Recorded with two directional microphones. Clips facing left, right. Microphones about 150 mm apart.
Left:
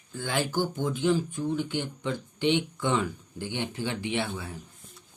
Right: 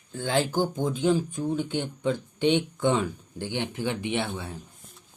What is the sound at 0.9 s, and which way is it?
Speech, 20° right (ahead or behind).